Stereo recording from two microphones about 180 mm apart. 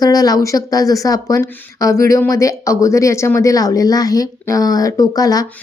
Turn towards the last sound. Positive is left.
turn(degrees=20)  # may be behind; listen again after turning